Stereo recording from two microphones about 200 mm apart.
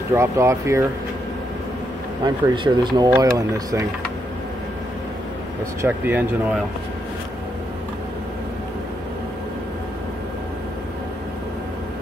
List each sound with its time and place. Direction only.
0.1 s speech: 15° right (ahead or behind)
2.2 s speech: 25° right (ahead or behind)
5.8 s speech: 10° right (ahead or behind)